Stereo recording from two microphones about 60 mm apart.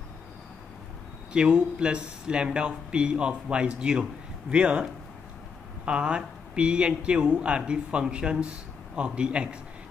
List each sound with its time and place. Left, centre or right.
1.3 s speech: centre
5.9 s speech: centre